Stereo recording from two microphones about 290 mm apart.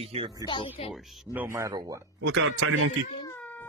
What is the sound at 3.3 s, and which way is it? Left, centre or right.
Cat, centre.